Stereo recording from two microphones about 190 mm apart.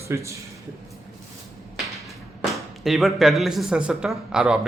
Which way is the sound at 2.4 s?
Centre (ahead or behind).